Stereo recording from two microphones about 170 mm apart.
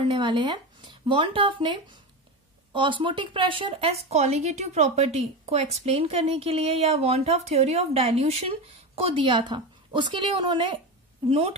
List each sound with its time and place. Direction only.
0.0 s a woman's voice: 30° right (ahead or behind)